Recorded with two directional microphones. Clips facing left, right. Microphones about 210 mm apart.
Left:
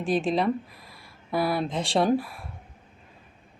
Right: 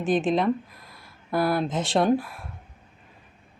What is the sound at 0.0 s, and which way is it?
Speech, centre (ahead or behind).